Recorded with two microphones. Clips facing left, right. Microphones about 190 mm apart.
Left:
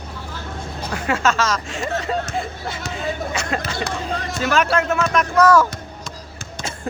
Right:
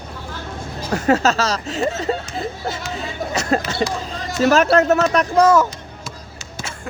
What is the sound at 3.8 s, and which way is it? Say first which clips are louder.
Speech: right 2 dB; 60° left (ahead or behind).